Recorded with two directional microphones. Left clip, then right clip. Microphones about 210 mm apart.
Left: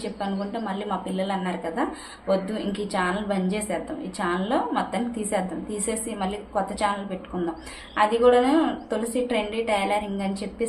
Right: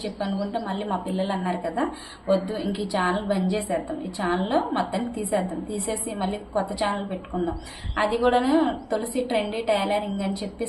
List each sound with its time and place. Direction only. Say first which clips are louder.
0.0 s a woman's voice: right 1 dB; centre (ahead or behind)
7.9 s a woman's voice: left 3 dB; 5° left (ahead or behind)